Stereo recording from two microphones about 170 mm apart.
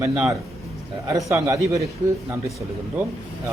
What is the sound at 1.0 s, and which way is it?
Speech, 20° right (ahead or behind).